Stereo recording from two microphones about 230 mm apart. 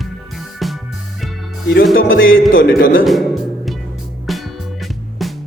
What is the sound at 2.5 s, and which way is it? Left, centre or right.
Speech, left.